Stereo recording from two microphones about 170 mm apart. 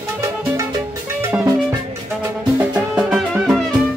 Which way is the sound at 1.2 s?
15° right (ahead or behind).